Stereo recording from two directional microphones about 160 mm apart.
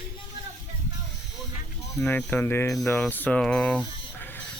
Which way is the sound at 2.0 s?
10° left (ahead or behind).